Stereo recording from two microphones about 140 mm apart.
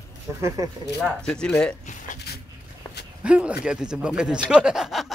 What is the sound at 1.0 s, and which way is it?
Speech, 5° left (ahead or behind).